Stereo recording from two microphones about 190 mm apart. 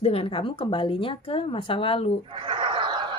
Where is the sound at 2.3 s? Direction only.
25° right (ahead or behind).